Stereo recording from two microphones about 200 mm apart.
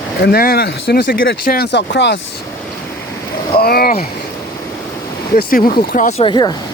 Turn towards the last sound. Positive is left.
turn(degrees=20)  # may be behind; listen again after turning